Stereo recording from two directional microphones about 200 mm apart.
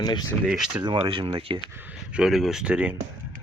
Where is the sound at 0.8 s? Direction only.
25° right (ahead or behind).